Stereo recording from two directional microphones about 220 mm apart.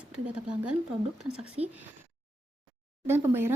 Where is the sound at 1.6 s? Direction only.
30° right (ahead or behind).